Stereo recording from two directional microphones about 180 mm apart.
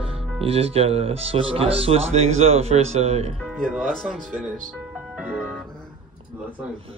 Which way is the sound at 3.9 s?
Centre (ahead or behind).